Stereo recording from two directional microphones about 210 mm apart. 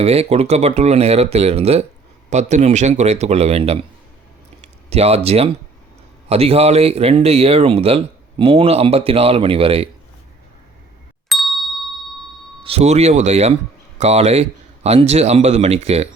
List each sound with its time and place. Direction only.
0.0 s speech: 30° right (ahead or behind)
11.3 s ding: centre (ahead or behind)
12.6 s speech: 30° right (ahead or behind)